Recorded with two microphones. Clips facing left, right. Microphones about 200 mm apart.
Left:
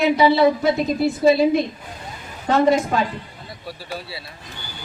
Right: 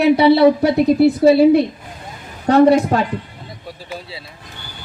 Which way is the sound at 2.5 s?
65° right (ahead or behind).